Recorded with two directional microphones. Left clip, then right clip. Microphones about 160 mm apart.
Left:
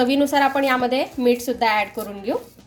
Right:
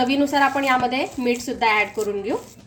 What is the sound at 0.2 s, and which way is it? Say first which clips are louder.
Speech: left 1 dB; 35° left (ahead or behind).